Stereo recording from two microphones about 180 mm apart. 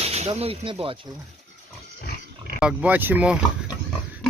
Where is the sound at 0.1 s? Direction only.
35° right (ahead or behind).